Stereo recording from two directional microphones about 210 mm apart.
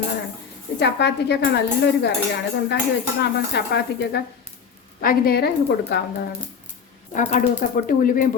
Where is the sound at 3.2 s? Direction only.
55° left (ahead or behind).